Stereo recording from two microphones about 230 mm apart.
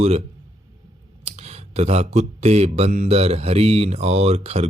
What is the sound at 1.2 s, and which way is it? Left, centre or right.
Speech, right.